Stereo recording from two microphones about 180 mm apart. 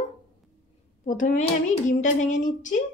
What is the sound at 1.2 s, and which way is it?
A woman's voice, 45° left (ahead or behind).